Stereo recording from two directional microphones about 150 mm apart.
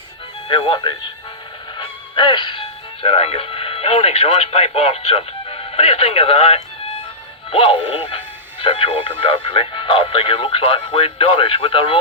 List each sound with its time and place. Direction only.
0.4 s speech: 30° left (ahead or behind)